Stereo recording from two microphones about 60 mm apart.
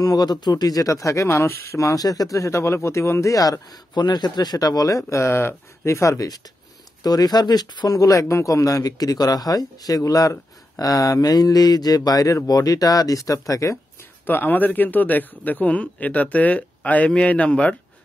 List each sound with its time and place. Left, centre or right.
0.0 s speech: left
2.3 s speech: left
4.6 s speech: left
6.1 s speech: left
7.8 s speech: left
14.2 s speech: left